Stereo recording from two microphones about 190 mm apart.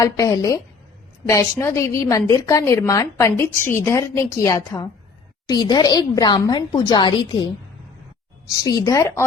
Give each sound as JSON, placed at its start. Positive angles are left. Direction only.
{"t": 0.0, "sound": "a woman's voice", "side_deg": 15}
{"t": 8.6, "sound": "a woman's voice", "side_deg": 15}